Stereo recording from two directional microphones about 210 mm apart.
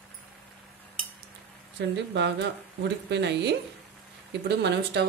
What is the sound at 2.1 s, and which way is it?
Speech, 55° right (ahead or behind).